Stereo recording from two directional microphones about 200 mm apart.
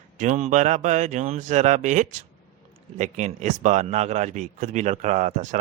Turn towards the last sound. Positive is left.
turn(degrees=-35)  # may be behind; listen again after turning